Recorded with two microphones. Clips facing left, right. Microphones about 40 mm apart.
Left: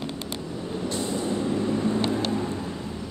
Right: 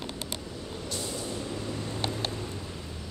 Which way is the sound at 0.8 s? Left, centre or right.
Left.